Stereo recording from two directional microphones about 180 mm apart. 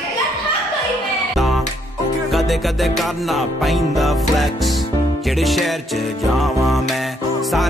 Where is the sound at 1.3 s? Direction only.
Centre (ahead or behind).